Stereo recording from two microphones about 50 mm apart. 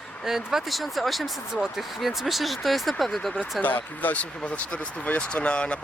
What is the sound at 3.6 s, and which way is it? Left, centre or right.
Speech, left.